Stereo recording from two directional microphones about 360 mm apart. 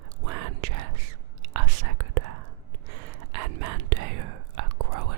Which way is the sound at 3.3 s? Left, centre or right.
Right.